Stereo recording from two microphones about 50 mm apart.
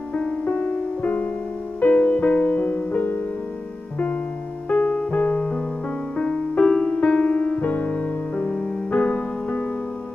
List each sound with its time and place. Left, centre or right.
0.1 s music: left
4.7 s music: left
5.1 s music: left